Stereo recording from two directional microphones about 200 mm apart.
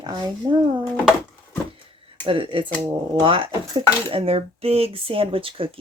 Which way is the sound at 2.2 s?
25° right (ahead or behind).